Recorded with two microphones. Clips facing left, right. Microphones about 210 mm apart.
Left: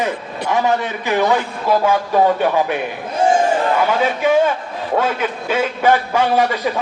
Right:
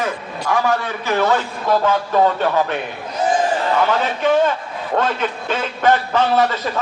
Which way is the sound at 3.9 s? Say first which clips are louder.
Left 1 dB; 10° left (ahead or behind).